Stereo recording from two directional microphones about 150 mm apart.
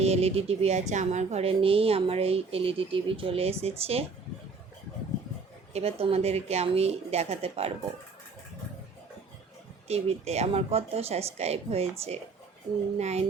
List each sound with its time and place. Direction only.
0.0 s a woman's voice: 45° right (ahead or behind)
5.7 s a woman's voice: 40° right (ahead or behind)
9.9 s a woman's voice: 45° right (ahead or behind)